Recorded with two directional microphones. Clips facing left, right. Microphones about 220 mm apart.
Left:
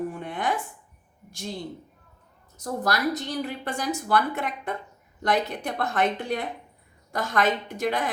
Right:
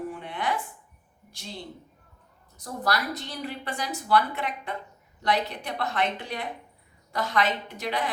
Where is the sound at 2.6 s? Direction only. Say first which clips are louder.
Left 2 dB; 45° left (ahead or behind).